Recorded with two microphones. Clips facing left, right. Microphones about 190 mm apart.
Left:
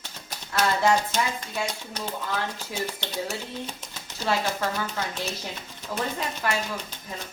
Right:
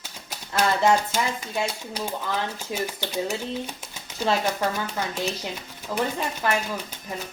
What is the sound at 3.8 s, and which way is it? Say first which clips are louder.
Typewriter: right 5 dB; 15° right (ahead or behind).